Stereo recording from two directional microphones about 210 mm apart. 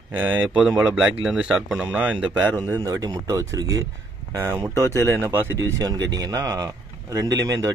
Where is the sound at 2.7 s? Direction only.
15° right (ahead or behind).